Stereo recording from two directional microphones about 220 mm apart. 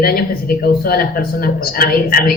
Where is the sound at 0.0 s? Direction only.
45° left (ahead or behind).